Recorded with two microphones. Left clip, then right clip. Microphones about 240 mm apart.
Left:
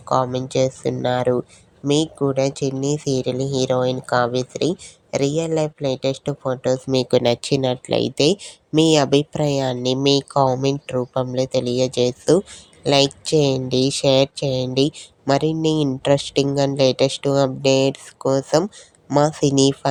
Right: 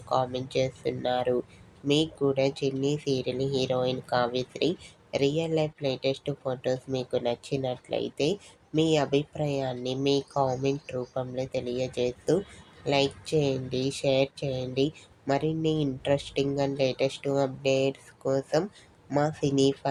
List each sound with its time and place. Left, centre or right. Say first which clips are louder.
0.1 s speech: left 8 dB; left
6.9 s speech: left 11 dB; left